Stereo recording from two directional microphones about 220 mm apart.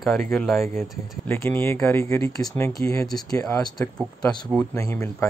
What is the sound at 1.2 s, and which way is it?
Speech, 10° left (ahead or behind).